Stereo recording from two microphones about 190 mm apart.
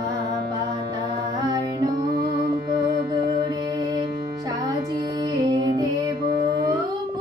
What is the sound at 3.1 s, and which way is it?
Music, 20° right (ahead or behind).